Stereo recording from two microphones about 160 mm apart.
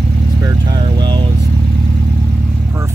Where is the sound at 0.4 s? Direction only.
25° right (ahead or behind).